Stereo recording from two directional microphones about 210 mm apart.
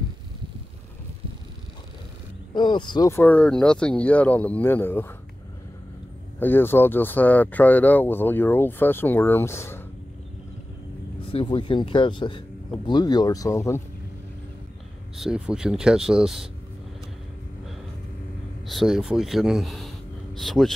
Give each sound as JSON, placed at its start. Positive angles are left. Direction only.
{"t": 2.5, "sound": "speech", "side_deg": 20}
{"t": 6.4, "sound": "speech", "side_deg": 10}
{"t": 11.2, "sound": "speech", "side_deg": 25}
{"t": 15.1, "sound": "speech", "side_deg": -5}
{"t": 18.7, "sound": "speech", "side_deg": 0}